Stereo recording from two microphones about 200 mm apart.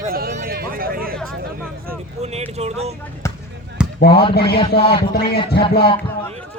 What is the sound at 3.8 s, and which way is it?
Basketball bounce, 5° right (ahead or behind).